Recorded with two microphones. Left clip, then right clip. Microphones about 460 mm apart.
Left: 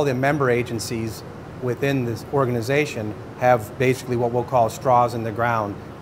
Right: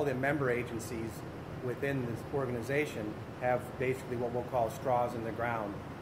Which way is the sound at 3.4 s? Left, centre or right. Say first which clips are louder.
Left 14 dB; left.